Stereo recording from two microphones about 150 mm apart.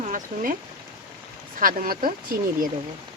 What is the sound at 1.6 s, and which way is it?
Speech, 70° right (ahead or behind).